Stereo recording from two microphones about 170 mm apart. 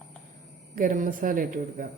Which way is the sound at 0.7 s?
50° right (ahead or behind).